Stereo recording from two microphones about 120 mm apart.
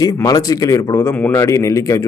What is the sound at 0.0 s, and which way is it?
A man's voice, 30° left (ahead or behind).